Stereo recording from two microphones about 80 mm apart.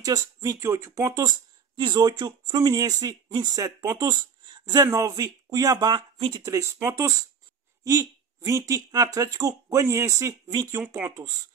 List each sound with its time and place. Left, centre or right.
0.0 s speech: right
1.8 s speech: right
3.5 s speech: right
4.8 s speech: right
6.4 s speech: right
10.5 s speech: right
11.1 s speech: right